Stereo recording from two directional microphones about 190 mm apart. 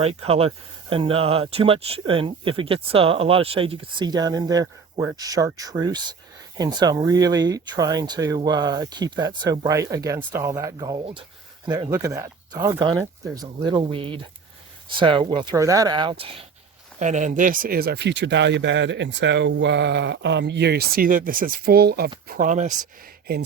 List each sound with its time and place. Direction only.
0.0 s speech: 30° right (ahead or behind)
17.0 s speech: 40° right (ahead or behind)
22.3 s speech: 45° right (ahead or behind)